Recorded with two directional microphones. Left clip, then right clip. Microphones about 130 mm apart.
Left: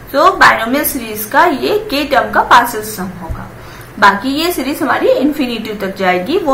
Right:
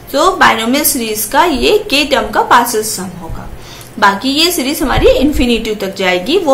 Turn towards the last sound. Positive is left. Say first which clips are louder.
# right 2 dB
turn(degrees=-20)  # may be behind; listen again after turning